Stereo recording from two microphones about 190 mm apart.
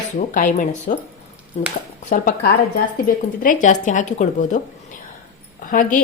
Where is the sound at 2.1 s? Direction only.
45° left (ahead or behind).